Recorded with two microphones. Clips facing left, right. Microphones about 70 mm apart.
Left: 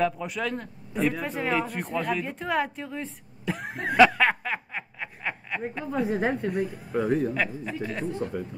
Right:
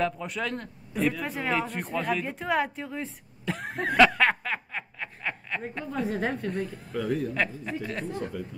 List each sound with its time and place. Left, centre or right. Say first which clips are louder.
0.0 s a man's voice: left 2 dB; centre
6.9 s a man's voice: left 4 dB; left
7.3 s a man's voice: left 1 dB; centre
8.1 s a man's voice: left 3 dB; left